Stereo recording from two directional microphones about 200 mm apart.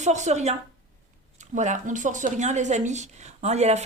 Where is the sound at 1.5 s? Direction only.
40° right (ahead or behind).